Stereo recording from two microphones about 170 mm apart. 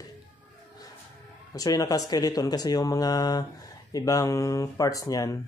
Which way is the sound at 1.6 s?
20° left (ahead or behind).